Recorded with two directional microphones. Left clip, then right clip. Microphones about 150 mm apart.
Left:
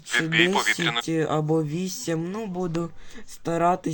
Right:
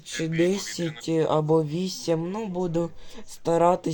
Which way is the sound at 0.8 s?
60° left (ahead or behind).